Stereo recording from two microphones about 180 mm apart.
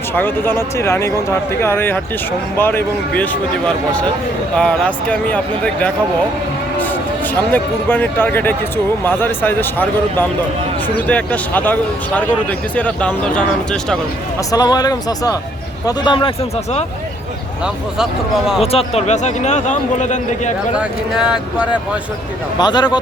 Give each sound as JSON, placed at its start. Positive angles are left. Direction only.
{"t": 0.1, "sound": "speech", "side_deg": 10}
{"t": 4.5, "sound": "speech", "side_deg": 5}
{"t": 7.5, "sound": "speech", "side_deg": 10}
{"t": 14.5, "sound": "speech", "side_deg": 20}
{"t": 17.9, "sound": "speech", "side_deg": -5}
{"t": 18.6, "sound": "a man's voice", "side_deg": 35}
{"t": 20.7, "sound": "speech", "side_deg": -5}
{"t": 22.5, "sound": "speech", "side_deg": 25}